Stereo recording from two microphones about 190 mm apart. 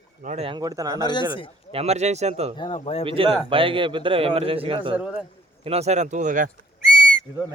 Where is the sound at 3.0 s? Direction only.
30° right (ahead or behind); by 6.5 s 45° right (ahead or behind).